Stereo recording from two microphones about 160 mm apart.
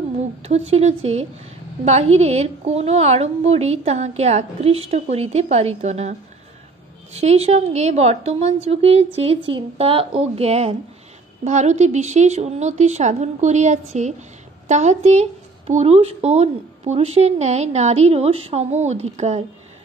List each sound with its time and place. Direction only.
0.4 s a woman's voice: 40° right (ahead or behind)